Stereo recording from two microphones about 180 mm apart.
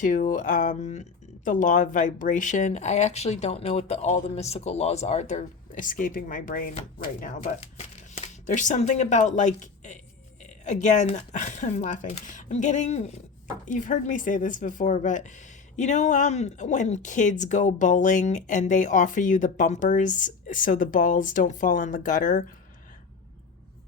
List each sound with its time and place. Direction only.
0.0 s speech: 45° left (ahead or behind)
6.7 s speech: 40° left (ahead or behind)